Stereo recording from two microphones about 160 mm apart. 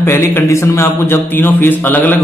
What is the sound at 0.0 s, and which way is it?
A man's voice, 15° left (ahead or behind).